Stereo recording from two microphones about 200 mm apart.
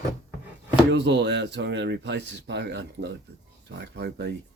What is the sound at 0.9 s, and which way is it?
Speech, 60° right (ahead or behind).